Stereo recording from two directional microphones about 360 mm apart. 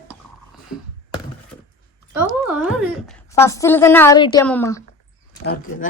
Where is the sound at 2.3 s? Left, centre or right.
Centre.